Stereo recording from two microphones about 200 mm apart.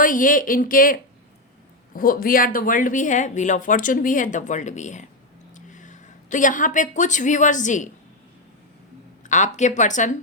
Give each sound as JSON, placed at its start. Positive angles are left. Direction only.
{"t": 0.0, "sound": "speech", "side_deg": 40}
{"t": 9.2, "sound": "speech", "side_deg": 35}